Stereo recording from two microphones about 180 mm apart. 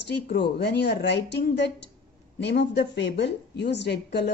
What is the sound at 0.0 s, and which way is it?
A woman's voice, 70° left (ahead or behind).